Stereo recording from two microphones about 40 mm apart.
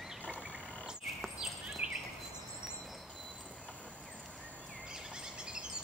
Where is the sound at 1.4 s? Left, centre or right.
Centre.